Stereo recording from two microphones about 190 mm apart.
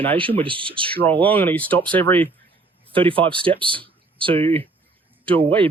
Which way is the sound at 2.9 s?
25° right (ahead or behind).